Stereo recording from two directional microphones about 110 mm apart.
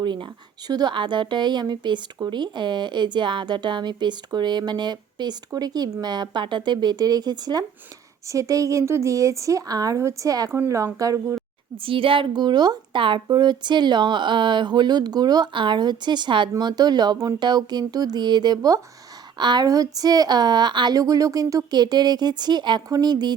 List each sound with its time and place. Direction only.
0.0 s speech: 45° right (ahead or behind)
11.8 s speech: 55° right (ahead or behind)